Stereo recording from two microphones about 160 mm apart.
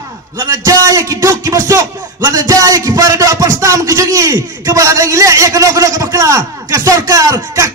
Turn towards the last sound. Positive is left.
turn(degrees=-20)  # may be behind; listen again after turning